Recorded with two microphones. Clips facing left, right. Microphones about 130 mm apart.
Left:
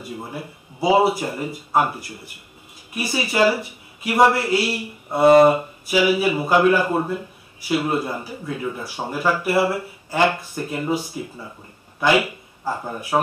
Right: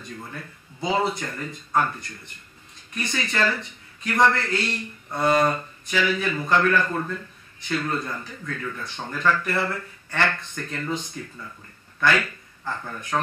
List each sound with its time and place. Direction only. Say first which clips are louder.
0.3 s speech: left 6 dB; 10° left (ahead or behind)
12.6 s speech: left 6 dB; 35° left (ahead or behind)